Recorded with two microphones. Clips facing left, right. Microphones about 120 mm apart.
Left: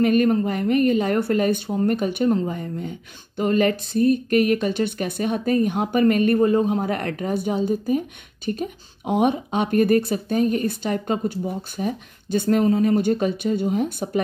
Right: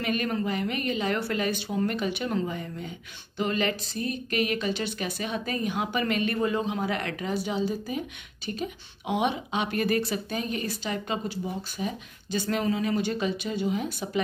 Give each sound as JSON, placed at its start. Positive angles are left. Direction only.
{"t": 0.0, "sound": "speech", "side_deg": 45}